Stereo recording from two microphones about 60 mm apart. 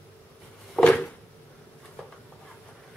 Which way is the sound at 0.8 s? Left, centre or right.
Centre.